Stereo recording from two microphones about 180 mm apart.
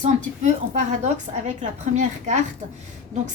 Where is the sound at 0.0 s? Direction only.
40° right (ahead or behind).